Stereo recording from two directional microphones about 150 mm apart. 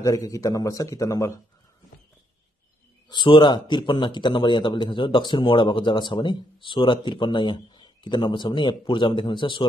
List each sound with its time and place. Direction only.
0.0 s a man's voice: 20° left (ahead or behind)
3.1 s a man's voice: 30° left (ahead or behind)